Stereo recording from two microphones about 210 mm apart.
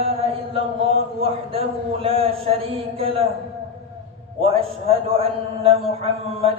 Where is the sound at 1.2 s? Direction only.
25° right (ahead or behind).